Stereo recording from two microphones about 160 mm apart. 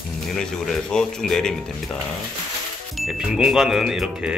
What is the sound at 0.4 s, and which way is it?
Speech, 5° left (ahead or behind).